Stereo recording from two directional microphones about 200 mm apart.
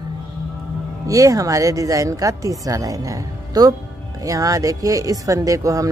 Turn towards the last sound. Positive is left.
turn(degrees=-15)  # may be behind; listen again after turning